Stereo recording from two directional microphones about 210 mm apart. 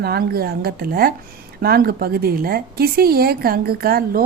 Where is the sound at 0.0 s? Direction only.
50° right (ahead or behind).